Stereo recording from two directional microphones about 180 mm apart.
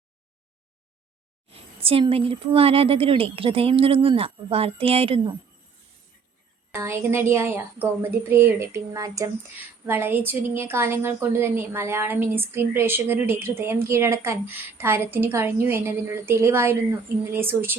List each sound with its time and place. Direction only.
1.5 s a woman's voice: 30° right (ahead or behind)
6.7 s a woman's voice: 15° right (ahead or behind)